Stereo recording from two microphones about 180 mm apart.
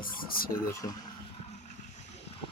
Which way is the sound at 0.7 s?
15° left (ahead or behind).